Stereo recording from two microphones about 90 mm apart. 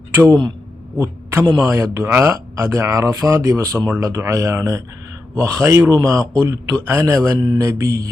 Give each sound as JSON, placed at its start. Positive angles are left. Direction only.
{"t": 0.1, "sound": "a man's voice", "side_deg": -30}
{"t": 7.3, "sound": "mantra", "side_deg": -55}
{"t": 7.6, "sound": "speech", "side_deg": -35}